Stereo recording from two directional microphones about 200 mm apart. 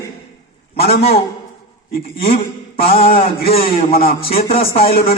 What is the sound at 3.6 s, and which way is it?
Speech, 45° left (ahead or behind).